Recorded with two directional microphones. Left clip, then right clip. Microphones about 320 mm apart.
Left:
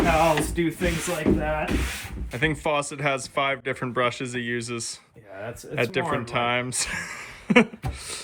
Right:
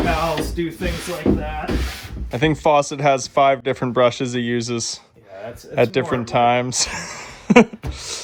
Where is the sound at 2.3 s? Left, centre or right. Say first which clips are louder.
Right 8 dB; centre.